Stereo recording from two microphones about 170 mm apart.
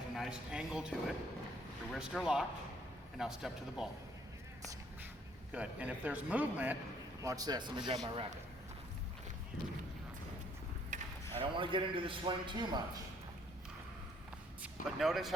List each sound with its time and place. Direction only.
0.2 s speech: centre (ahead or behind)
5.5 s a man's voice: 5° right (ahead or behind)
7.2 s a man's voice: 20° right (ahead or behind)
11.3 s a man's voice: 30° right (ahead or behind)
14.6 s speech: centre (ahead or behind)